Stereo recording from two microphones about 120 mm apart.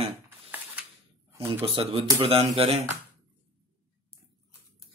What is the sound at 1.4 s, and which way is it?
Speech, 45° right (ahead or behind).